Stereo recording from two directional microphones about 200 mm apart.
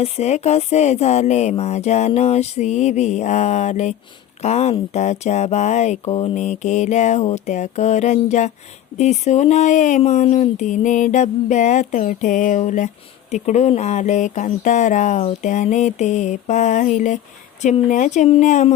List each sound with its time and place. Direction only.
0.0 s speech: 35° left (ahead or behind)